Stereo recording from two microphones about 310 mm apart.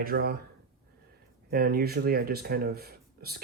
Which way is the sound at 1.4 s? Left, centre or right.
Right.